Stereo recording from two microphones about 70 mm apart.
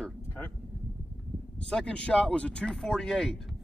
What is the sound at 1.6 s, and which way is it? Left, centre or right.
Speech, centre.